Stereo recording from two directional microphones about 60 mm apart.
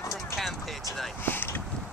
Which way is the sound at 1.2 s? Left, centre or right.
Left.